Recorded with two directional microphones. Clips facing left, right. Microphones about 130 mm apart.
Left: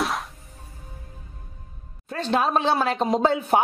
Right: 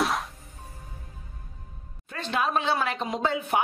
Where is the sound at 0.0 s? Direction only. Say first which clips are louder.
Even; centre (ahead or behind).